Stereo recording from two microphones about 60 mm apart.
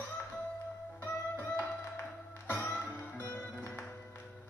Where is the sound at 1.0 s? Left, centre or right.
Left.